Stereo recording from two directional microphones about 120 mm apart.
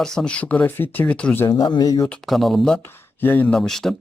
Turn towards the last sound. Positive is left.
turn(degrees=5)  # may be behind; listen again after turning